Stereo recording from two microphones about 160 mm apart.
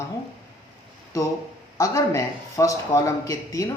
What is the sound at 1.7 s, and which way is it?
Speech, 20° left (ahead or behind).